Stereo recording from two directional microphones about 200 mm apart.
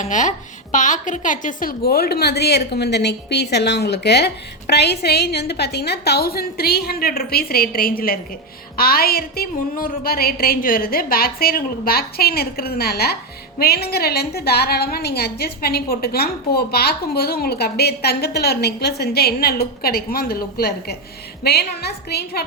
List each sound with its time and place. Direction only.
0.0 s a woman's voice: 40° left (ahead or behind)